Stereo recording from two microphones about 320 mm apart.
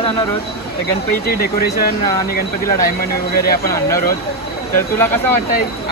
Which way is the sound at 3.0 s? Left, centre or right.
Left.